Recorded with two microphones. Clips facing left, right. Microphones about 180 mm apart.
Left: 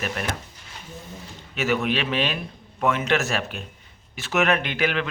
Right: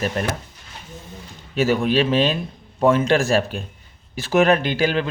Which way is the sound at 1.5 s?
35° right (ahead or behind).